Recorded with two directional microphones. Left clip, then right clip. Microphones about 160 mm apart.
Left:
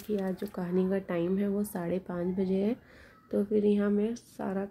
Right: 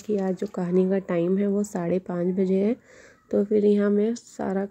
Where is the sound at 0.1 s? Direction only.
25° right (ahead or behind).